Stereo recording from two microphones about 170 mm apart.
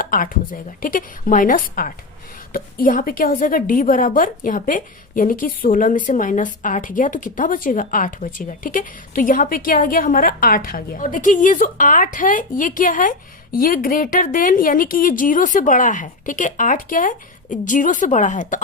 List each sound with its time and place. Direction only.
0.0 s a woman's voice: 55° left (ahead or behind)